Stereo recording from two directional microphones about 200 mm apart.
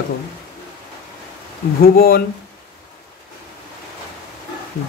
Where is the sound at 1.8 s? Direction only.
50° left (ahead or behind).